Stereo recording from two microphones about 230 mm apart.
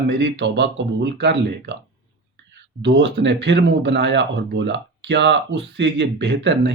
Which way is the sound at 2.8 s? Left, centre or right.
Right.